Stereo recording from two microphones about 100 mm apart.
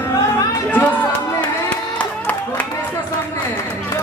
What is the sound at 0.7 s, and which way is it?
Chatter, 15° left (ahead or behind).